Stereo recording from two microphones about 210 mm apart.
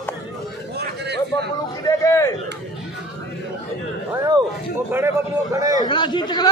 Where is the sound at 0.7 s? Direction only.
55° right (ahead or behind).